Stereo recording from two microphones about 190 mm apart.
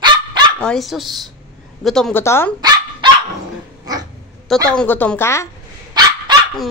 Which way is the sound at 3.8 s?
20° right (ahead or behind).